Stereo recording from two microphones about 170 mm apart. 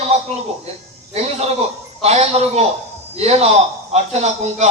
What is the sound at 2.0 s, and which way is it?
A man's voice, 40° right (ahead or behind).